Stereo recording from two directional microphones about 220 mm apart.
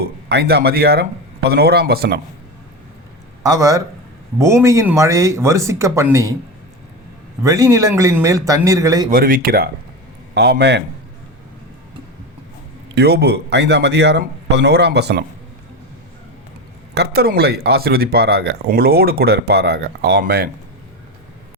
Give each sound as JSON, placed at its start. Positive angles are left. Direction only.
{"t": 0.3, "sound": "speech", "side_deg": -45}
{"t": 3.4, "sound": "speech", "side_deg": -15}
{"t": 7.4, "sound": "speech", "side_deg": -15}
{"t": 9.0, "sound": "speech", "side_deg": -40}
{"t": 13.0, "sound": "speech", "side_deg": -45}
{"t": 16.9, "sound": "speech", "side_deg": -45}